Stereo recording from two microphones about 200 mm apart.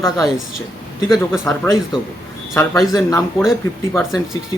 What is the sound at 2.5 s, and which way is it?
Speech, 15° left (ahead or behind).